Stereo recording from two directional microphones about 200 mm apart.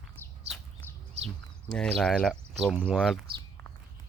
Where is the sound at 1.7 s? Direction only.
5° left (ahead or behind).